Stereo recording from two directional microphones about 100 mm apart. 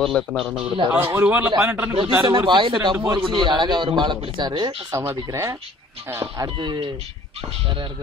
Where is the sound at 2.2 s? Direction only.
45° right (ahead or behind).